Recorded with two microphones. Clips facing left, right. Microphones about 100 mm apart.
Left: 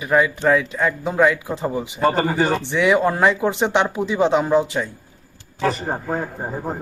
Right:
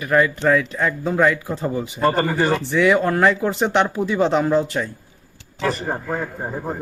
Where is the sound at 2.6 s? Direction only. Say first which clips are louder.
Right 1 dB; 20° left (ahead or behind).